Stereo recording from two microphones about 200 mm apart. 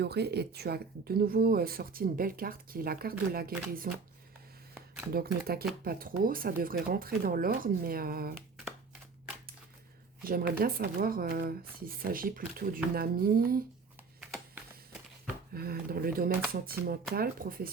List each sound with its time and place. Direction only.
0.0 s speech: 55° right (ahead or behind)
5.1 s speech: 50° right (ahead or behind)
10.2 s speech: 50° right (ahead or behind)
14.2 s typing: 10° right (ahead or behind)
15.5 s speech: 50° right (ahead or behind)